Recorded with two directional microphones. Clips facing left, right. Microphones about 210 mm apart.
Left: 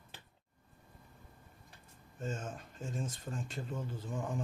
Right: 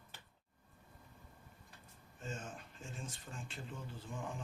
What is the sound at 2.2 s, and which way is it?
Speech, 45° left (ahead or behind).